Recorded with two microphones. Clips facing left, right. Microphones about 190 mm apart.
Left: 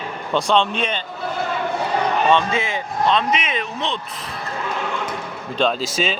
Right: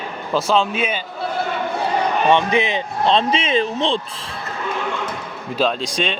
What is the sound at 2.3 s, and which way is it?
Speech, 15° right (ahead or behind).